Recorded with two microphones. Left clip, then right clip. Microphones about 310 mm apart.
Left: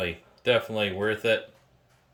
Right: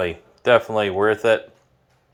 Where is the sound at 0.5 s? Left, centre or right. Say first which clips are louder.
Right 8 dB; right.